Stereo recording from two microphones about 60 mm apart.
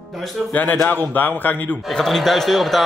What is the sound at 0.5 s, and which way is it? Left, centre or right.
A man's voice, left.